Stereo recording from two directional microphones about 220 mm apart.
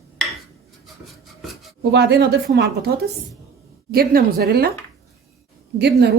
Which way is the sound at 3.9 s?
45° right (ahead or behind).